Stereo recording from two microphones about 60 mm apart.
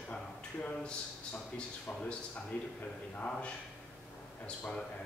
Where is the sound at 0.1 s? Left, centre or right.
Left.